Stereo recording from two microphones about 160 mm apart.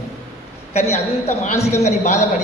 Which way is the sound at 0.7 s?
45° left (ahead or behind).